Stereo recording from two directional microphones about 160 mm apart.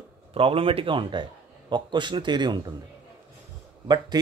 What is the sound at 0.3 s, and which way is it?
Speech, 35° right (ahead or behind).